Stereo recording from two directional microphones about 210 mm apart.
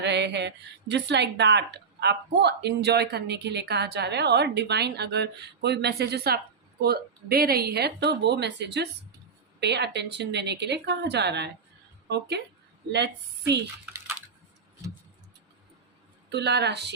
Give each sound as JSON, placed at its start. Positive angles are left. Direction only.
{"t": 0.0, "sound": "speech", "side_deg": -55}
{"t": 16.3, "sound": "speech", "side_deg": -55}